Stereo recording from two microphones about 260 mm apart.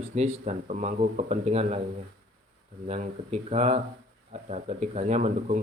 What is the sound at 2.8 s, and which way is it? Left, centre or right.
Speech, right.